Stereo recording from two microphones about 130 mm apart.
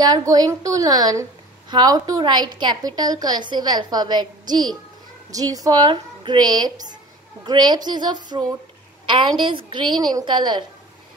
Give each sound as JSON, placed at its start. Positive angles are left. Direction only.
{"t": 0.0, "sound": "a woman's voice", "side_deg": -30}